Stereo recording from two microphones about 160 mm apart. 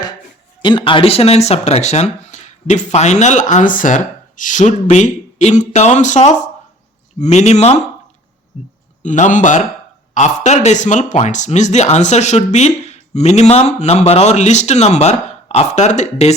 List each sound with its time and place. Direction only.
0.6 s speech: 30° left (ahead or behind)